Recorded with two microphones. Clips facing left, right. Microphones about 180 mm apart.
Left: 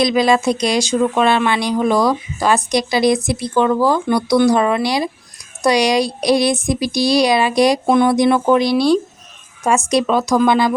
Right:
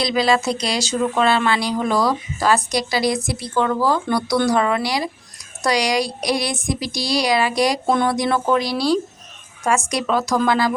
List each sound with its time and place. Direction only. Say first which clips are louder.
0.0 s speech: left 4 dB; 20° left (ahead or behind)